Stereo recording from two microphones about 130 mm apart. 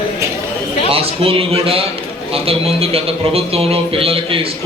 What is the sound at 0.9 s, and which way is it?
A man's voice, 45° right (ahead or behind).